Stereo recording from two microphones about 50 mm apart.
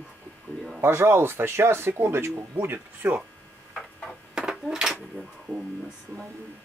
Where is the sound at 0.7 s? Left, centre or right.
Right.